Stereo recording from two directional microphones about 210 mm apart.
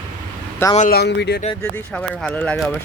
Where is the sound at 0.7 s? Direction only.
35° left (ahead or behind).